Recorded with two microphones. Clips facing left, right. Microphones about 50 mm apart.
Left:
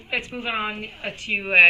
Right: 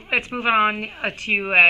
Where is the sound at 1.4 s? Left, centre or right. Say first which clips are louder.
Even; right.